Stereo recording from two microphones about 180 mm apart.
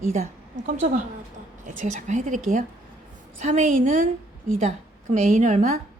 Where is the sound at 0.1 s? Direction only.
40° right (ahead or behind).